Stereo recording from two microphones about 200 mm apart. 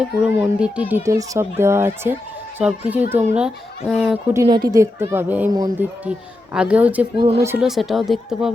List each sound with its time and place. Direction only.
0.0 s speech: 5° right (ahead or behind)
4.4 s speech: 20° right (ahead or behind)
6.1 s speech: 5° right (ahead or behind)